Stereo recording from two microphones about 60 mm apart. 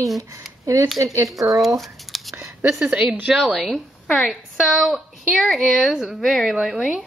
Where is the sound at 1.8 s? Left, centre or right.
Centre.